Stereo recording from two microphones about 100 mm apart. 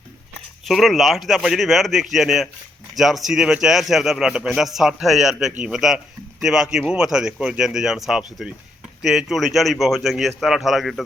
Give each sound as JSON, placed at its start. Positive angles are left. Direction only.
{"t": 0.6, "sound": "speech", "side_deg": 0}